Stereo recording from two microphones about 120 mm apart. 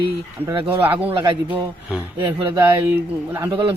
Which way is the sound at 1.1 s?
45° right (ahead or behind).